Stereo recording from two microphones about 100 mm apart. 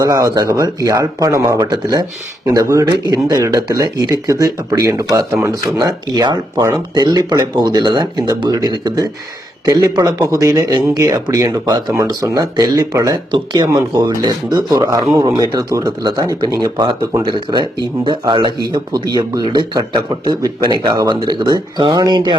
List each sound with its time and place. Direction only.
0.0 s speech: 40° right (ahead or behind)